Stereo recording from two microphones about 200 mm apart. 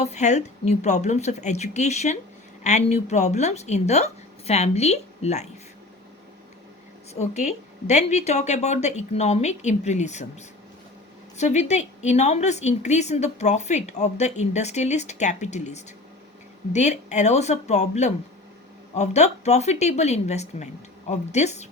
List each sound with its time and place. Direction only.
0.0 s a woman's voice: 35° left (ahead or behind)
7.1 s a woman's voice: 35° left (ahead or behind)
11.3 s a woman's voice: 35° left (ahead or behind)